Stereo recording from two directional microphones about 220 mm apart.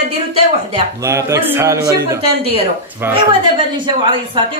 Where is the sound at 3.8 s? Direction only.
20° right (ahead or behind).